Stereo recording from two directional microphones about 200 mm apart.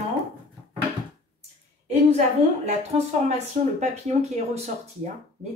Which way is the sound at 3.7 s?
35° right (ahead or behind).